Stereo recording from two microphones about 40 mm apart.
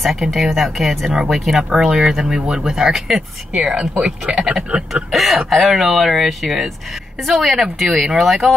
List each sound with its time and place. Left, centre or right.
0.0 s speech: centre; by 5.0 s right
5.1 s speech: centre